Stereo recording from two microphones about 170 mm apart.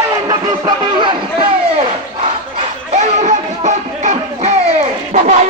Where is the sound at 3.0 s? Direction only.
45° right (ahead or behind).